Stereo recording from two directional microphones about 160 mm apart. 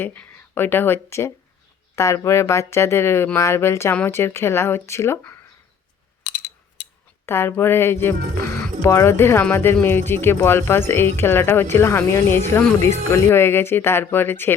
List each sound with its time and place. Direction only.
0.0 s speech: 10° left (ahead or behind)
6.3 s a sound: 60° left (ahead or behind)
7.3 s speech: 15° left (ahead or behind)